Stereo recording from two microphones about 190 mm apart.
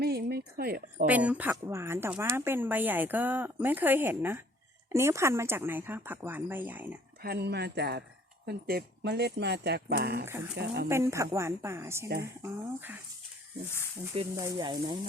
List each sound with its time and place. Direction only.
0.0 s a woman's voice: 55° right (ahead or behind)
1.0 s speech: 5° right (ahead or behind)
7.2 s speech: 55° right (ahead or behind)
10.2 s speech: 10° right (ahead or behind)
10.5 s speech: 60° right (ahead or behind)
10.8 s speech: 15° right (ahead or behind)
14.3 s speech: 20° right (ahead or behind)